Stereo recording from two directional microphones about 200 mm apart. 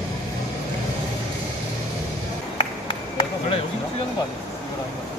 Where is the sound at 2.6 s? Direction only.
25° left (ahead or behind).